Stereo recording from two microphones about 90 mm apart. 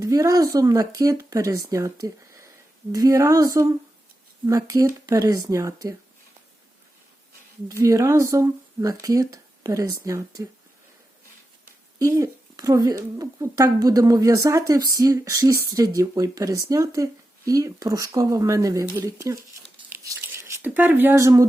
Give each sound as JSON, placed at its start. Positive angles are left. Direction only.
{"t": 0.0, "sound": "speech", "side_deg": -40}
{"t": 7.7, "sound": "speech", "side_deg": -35}
{"t": 11.9, "sound": "speech", "side_deg": -40}
{"t": 19.9, "sound": "a sound", "side_deg": -20}
{"t": 21.2, "sound": "speech", "side_deg": -35}